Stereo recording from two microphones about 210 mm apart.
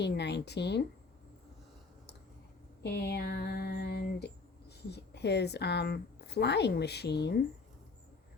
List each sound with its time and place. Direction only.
0.0 s speech: 55° left (ahead or behind)
2.8 s a sound: 50° left (ahead or behind)
4.9 s speech: 55° left (ahead or behind)